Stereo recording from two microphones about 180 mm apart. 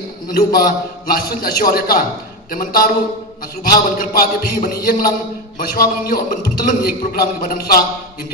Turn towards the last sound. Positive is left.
turn(degrees=55)  # may be behind; listen again after turning